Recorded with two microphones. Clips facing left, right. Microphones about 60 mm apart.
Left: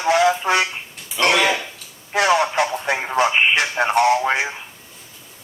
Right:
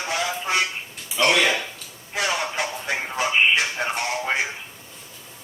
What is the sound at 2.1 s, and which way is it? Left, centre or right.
Speech, left.